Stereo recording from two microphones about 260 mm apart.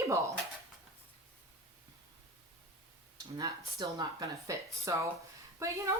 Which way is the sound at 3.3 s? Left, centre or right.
Centre.